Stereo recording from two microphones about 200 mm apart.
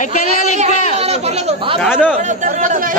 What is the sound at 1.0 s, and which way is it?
Speech, 30° right (ahead or behind).